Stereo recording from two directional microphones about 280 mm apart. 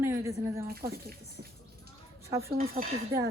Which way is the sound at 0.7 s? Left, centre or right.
Right.